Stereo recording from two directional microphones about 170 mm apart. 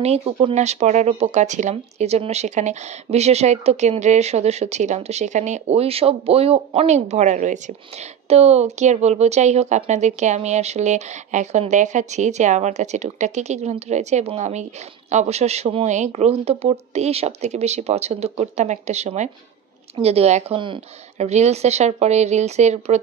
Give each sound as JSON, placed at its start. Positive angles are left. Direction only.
{"t": 0.2, "sound": "speech", "side_deg": -30}
{"t": 0.6, "sound": "speech", "side_deg": -40}
{"t": 21.3, "sound": "speech", "side_deg": -40}